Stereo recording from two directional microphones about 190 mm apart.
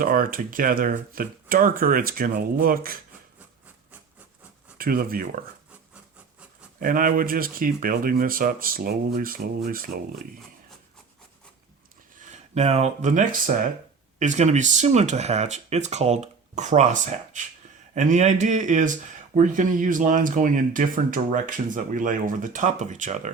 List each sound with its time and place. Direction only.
0.0 s speech: 50° right (ahead or behind)
4.8 s speech: 50° right (ahead or behind)
6.7 s speech: 45° right (ahead or behind)
12.3 s speech: 35° right (ahead or behind)